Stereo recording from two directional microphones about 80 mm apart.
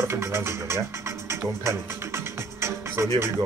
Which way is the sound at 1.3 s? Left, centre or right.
Right.